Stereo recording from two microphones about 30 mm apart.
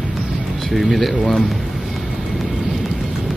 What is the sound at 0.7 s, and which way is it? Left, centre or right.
Speech, centre.